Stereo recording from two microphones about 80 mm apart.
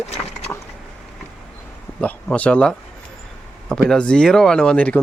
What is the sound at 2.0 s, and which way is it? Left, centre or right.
Speech, centre.